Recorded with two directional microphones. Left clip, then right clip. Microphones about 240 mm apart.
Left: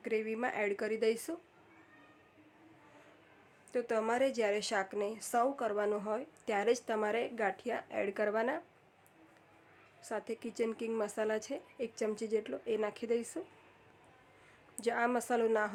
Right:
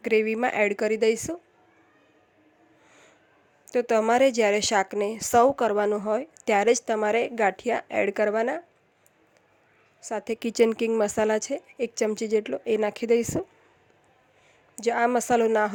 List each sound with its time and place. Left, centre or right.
0.0 s a woman's voice: right
3.7 s a woman's voice: right
10.1 s a woman's voice: right
14.8 s a woman's voice: right